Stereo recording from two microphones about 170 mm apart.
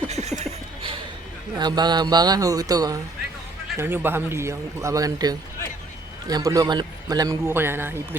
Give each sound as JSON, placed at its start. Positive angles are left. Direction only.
{"t": 0.1, "sound": "chuckle", "side_deg": -40}
{"t": 1.5, "sound": "a man's voice", "side_deg": -25}